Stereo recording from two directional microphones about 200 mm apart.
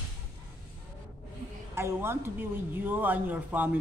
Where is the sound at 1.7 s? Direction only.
10° right (ahead or behind).